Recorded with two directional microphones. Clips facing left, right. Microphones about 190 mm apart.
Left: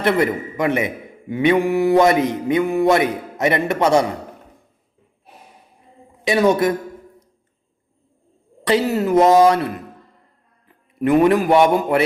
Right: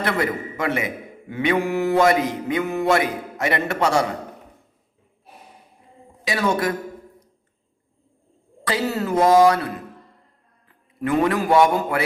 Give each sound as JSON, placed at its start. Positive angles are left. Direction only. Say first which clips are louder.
{"t": 0.2, "sound": "a man's voice", "louder": "left 5 dB", "side_deg": 15}
{"t": 6.2, "sound": "a man's voice", "louder": "left 6 dB", "side_deg": 20}
{"t": 8.6, "sound": "a man's voice", "louder": "left 6 dB", "side_deg": 20}
{"t": 11.0, "sound": "a man's voice", "louder": "left 6 dB", "side_deg": 20}